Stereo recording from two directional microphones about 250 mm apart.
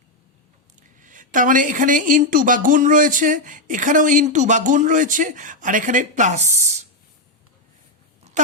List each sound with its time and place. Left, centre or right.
1.0 s a woman's voice: right